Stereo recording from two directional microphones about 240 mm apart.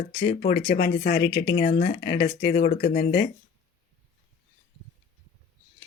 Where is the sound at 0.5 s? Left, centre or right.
Left.